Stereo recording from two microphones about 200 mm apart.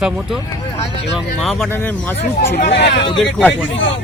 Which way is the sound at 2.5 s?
55° left (ahead or behind).